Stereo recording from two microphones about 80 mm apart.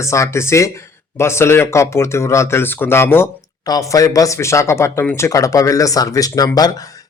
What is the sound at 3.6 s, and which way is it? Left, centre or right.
A man's voice, left.